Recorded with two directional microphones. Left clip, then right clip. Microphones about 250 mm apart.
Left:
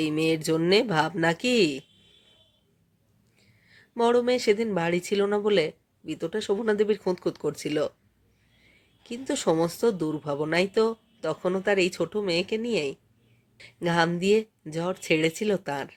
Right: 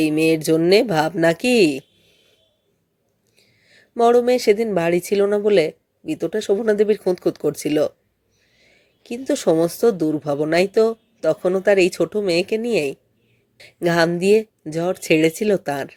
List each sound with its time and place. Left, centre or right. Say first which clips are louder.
0.0 s speech: right 8 dB; centre
3.4 s speech: right 4 dB; centre